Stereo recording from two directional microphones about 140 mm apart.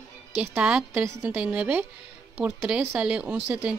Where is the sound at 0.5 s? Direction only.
5° right (ahead or behind).